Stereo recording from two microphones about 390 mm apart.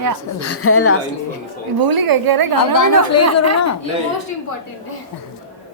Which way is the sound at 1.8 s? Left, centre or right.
Right.